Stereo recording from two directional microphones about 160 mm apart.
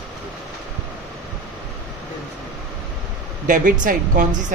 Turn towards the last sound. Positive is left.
turn(degrees=-55)  # may be behind; listen again after turning